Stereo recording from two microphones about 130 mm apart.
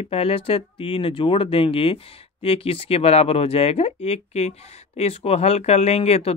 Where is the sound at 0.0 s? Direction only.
50° left (ahead or behind).